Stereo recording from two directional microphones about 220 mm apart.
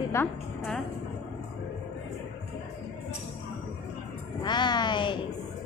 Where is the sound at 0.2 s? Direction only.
10° left (ahead or behind).